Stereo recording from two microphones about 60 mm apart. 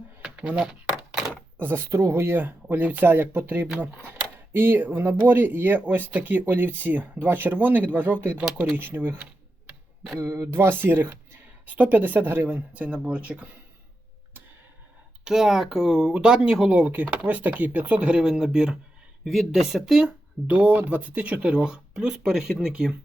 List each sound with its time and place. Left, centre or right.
0.2 s a sound: centre
1.3 s door: right
1.9 s speech: right
10.2 s speech: right
10.5 s speech: right; by 13.6 s centre
15.2 s speech: centre
16.7 s speech: right